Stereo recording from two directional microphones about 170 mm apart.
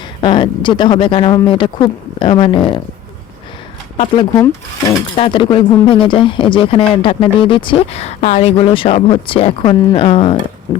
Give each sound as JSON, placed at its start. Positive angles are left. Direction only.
{"t": 0.2, "sound": "speech", "side_deg": 25}
{"t": 3.9, "sound": "speech", "side_deg": 30}
{"t": 5.1, "sound": "speech", "side_deg": 30}